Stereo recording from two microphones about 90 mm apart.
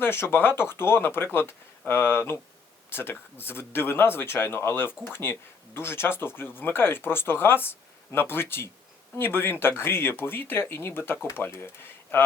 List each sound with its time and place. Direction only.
0.0 s speech: 25° left (ahead or behind)